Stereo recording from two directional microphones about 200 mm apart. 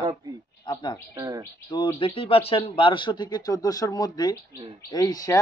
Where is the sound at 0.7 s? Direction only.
20° left (ahead or behind).